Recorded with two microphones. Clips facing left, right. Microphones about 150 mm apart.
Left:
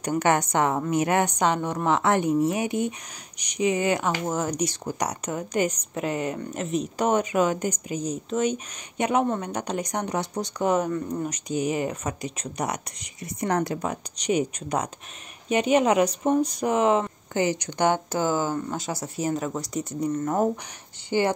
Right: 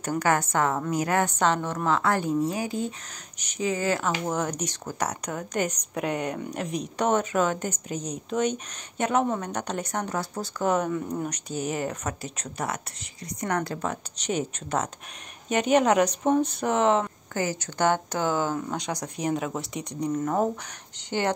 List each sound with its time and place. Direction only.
0.2 s a woman's voice: 20° left (ahead or behind)
10.7 s speech: centre (ahead or behind)
11.6 s a woman's voice: 10° left (ahead or behind)
13.8 s a woman's voice: 10° left (ahead or behind)
17.3 s speech: 20° left (ahead or behind)